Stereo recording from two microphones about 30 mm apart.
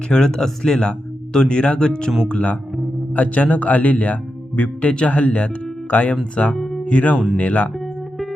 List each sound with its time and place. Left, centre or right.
0.1 s speech: left
2.2 s speech: left
3.2 s speech: left
5.9 s speech: left
6.3 s speech: left
6.6 s music: centre
6.8 s speech: left